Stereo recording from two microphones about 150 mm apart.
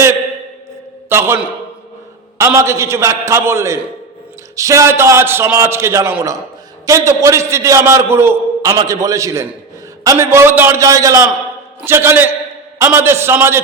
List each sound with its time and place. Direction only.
1.1 s a man's voice: 15° right (ahead or behind)
2.4 s a man's voice: 20° right (ahead or behind)